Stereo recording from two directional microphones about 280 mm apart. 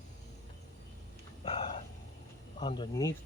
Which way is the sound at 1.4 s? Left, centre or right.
Centre.